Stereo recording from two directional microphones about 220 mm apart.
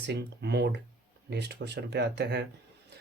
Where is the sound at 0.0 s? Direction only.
50° right (ahead or behind).